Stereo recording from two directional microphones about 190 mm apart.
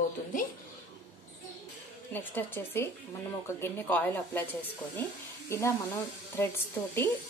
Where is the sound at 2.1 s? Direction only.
10° left (ahead or behind).